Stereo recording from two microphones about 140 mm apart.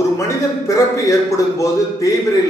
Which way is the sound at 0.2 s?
25° left (ahead or behind).